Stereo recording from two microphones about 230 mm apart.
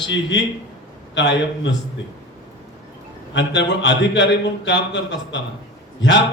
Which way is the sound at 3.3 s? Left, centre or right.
Left.